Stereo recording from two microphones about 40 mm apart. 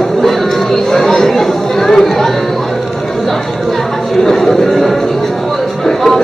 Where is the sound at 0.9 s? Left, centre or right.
Centre.